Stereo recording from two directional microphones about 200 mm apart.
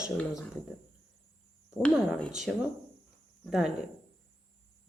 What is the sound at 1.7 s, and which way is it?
Speech, 5° left (ahead or behind).